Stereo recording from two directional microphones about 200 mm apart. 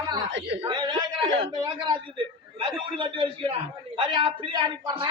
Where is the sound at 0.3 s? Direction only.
65° right (ahead or behind).